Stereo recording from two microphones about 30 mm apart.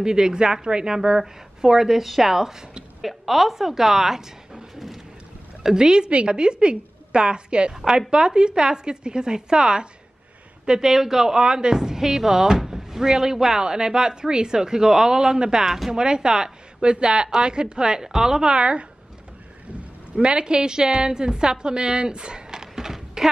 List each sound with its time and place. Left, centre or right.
0.0 s a woman's voice: right
4.7 s a sound: centre
5.6 s a woman's voice: centre
5.9 s a woman's voice: right
15.6 s a woman's voice: centre
15.9 s speech: right
18.5 s a woman's voice: right
20.2 s a woman's voice: right; by 23.3 s centre